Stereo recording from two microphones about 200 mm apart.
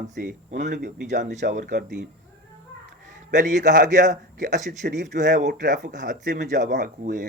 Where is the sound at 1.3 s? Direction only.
40° right (ahead or behind).